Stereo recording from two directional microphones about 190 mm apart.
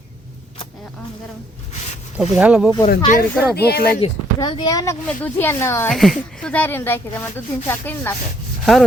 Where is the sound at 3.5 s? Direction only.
55° left (ahead or behind).